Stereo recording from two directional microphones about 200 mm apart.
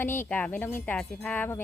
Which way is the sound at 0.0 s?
10° left (ahead or behind).